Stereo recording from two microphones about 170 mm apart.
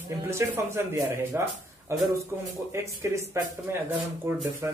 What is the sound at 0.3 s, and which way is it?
Speech, 15° right (ahead or behind).